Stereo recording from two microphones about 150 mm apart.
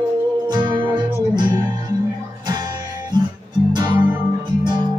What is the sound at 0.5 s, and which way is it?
Music, 30° right (ahead or behind).